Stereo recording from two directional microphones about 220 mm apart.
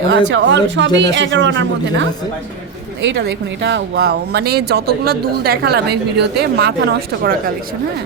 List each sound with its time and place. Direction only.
0.1 s speech: 60° right (ahead or behind)